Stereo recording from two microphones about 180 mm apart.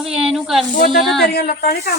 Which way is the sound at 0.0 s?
Centre (ahead or behind).